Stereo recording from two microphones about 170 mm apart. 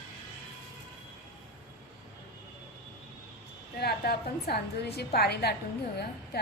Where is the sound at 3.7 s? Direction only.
65° left (ahead or behind).